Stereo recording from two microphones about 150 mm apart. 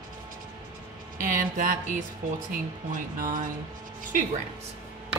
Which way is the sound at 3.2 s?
65° right (ahead or behind).